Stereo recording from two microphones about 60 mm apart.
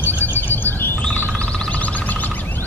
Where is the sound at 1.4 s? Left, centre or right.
Left.